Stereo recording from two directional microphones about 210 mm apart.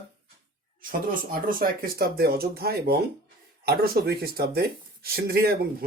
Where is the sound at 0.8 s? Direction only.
40° right (ahead or behind).